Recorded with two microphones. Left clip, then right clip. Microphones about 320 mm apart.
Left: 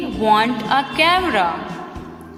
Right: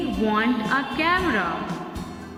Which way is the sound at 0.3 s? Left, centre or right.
Centre.